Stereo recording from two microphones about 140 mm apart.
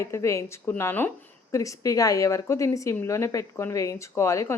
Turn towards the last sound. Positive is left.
turn(degrees=20)  # may be behind; listen again after turning